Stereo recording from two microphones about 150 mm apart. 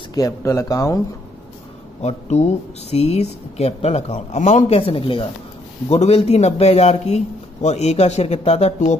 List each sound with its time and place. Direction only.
0.1 s speech: 20° left (ahead or behind)
2.0 s speech: 50° left (ahead or behind)